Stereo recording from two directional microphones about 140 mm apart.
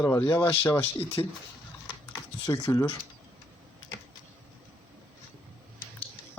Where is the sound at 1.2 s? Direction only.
30° left (ahead or behind).